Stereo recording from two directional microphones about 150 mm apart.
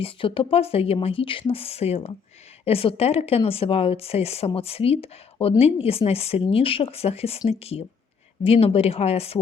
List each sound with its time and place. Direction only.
0.0 s speech: 35° left (ahead or behind)